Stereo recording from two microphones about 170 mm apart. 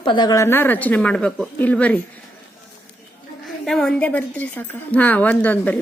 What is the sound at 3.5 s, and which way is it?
A woman's voice, centre (ahead or behind).